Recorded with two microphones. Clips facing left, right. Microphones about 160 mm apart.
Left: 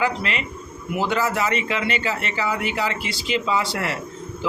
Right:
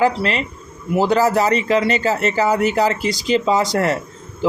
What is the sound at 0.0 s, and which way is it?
Speech, 35° right (ahead or behind).